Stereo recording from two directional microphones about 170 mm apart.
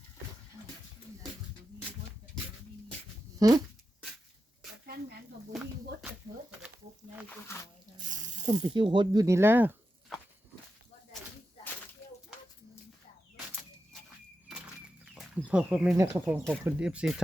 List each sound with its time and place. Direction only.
3.3 s speech: 20° right (ahead or behind)
7.3 s speech: 15° left (ahead or behind)
8.0 s speech: 50° right (ahead or behind)
8.6 s speech: 30° right (ahead or behind); by 9.7 s 10° right (ahead or behind)
15.1 s a sound: 5° right (ahead or behind)
16.0 s speech: 15° right (ahead or behind)